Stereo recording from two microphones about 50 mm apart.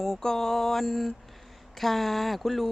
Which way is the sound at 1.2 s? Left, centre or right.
Centre.